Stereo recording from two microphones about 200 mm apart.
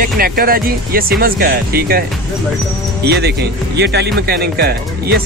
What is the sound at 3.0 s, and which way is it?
Speech, 55° right (ahead or behind).